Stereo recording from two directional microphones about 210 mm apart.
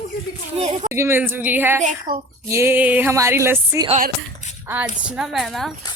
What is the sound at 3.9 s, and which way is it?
Speech, 40° right (ahead or behind).